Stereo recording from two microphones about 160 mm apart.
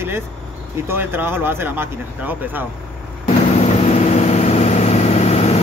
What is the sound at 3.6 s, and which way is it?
Vehicle, 45° left (ahead or behind).